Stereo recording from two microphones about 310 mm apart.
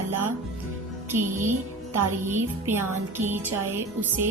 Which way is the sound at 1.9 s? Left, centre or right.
Centre.